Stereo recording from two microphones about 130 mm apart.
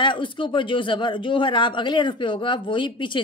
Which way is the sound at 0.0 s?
40° left (ahead or behind).